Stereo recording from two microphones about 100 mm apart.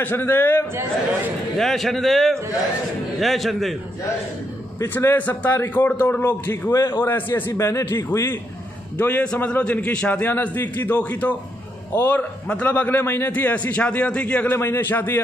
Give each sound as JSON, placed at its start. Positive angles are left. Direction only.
{"t": 0.0, "sound": "a man's voice", "side_deg": 20}
{"t": 1.6, "sound": "a man's voice", "side_deg": 0}
{"t": 4.8, "sound": "a man's voice", "side_deg": 20}
{"t": 8.9, "sound": "a man's voice", "side_deg": 15}